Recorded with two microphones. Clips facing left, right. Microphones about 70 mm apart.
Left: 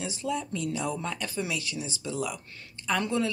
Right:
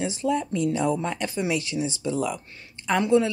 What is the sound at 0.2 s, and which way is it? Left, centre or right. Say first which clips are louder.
A woman's voice: right 7 dB; right.